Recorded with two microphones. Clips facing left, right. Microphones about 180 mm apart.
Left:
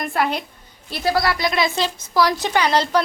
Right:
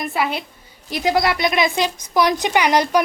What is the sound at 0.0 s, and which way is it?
Speech, 5° right (ahead or behind).